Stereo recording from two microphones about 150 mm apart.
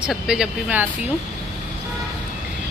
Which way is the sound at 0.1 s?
5° right (ahead or behind).